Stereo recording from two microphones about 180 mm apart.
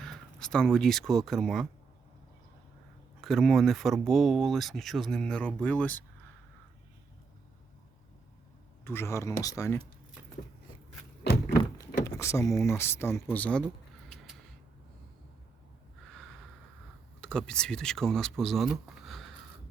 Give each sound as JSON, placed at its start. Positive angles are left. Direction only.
{"t": 0.0, "sound": "speech", "side_deg": 5}
{"t": 3.2, "sound": "speech", "side_deg": 0}
{"t": 8.8, "sound": "speech", "side_deg": 15}
{"t": 11.5, "sound": "speech", "side_deg": 20}
{"t": 17.2, "sound": "speech", "side_deg": 5}